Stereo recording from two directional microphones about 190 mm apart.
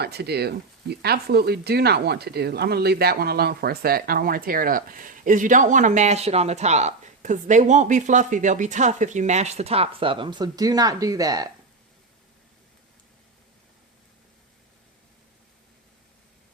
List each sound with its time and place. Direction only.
0.0 s speech: 60° right (ahead or behind); by 11.4 s 20° right (ahead or behind)